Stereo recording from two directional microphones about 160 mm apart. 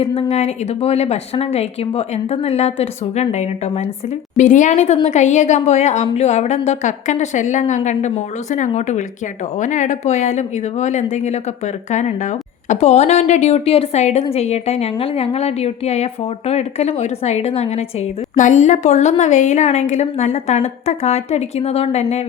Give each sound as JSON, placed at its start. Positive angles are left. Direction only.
{"t": 0.0, "sound": "a woman's voice", "side_deg": 40}